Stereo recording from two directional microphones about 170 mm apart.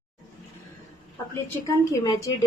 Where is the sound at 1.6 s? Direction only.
20° left (ahead or behind).